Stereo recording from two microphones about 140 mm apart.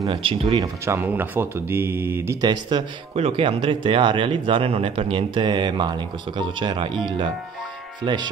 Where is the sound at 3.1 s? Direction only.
45° right (ahead or behind).